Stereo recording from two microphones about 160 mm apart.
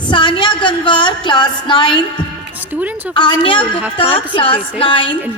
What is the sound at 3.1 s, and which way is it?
A woman's voice, 30° left (ahead or behind).